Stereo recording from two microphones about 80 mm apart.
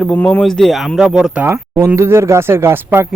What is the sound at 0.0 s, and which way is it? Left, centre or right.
Speech, centre.